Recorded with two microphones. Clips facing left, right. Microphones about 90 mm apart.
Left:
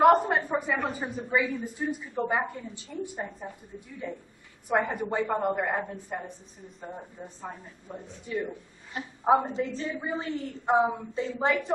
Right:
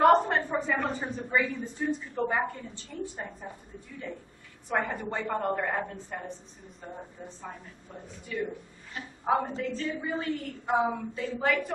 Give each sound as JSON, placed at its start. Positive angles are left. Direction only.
{"t": 0.0, "sound": "a woman's voice", "side_deg": 10}
{"t": 3.2, "sound": "a woman's voice", "side_deg": 0}
{"t": 4.8, "sound": "a woman's voice", "side_deg": 5}
{"t": 7.9, "sound": "a woman's voice", "side_deg": 20}
{"t": 9.6, "sound": "a woman's voice", "side_deg": 0}
{"t": 9.9, "sound": "a woman's voice", "side_deg": 25}